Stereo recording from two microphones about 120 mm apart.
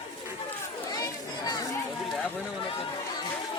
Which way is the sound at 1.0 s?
30° left (ahead or behind).